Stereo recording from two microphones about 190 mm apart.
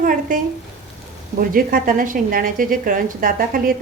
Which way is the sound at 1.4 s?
50° right (ahead or behind).